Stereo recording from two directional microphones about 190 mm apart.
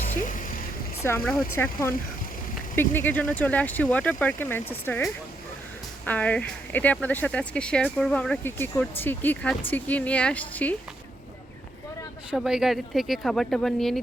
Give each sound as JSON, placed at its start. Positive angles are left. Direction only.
{"t": 0.2, "sound": "music", "side_deg": 45}
{"t": 1.0, "sound": "speech", "side_deg": 10}
{"t": 6.1, "sound": "speech", "side_deg": 10}
{"t": 12.3, "sound": "speech", "side_deg": -5}